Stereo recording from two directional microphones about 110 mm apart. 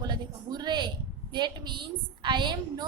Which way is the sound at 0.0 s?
40° right (ahead or behind).